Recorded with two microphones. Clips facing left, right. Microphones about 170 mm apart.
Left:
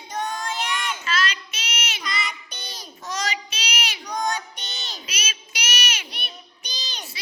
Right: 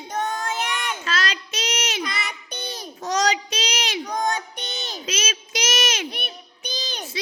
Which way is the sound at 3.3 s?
90° right.